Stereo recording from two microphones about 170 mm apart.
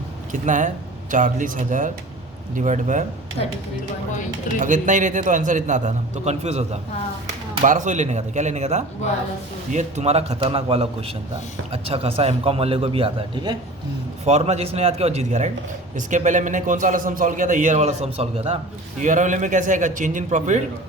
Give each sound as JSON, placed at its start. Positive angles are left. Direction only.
{"t": 0.4, "sound": "a man's voice", "side_deg": -50}
{"t": 4.6, "sound": "a man's voice", "side_deg": -50}
{"t": 14.3, "sound": "a man's voice", "side_deg": -40}